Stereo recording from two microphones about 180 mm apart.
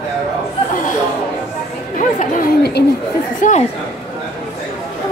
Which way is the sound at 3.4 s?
45° left (ahead or behind).